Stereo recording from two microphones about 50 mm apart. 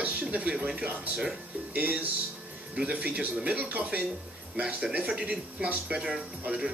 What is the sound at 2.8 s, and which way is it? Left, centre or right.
Speech, right.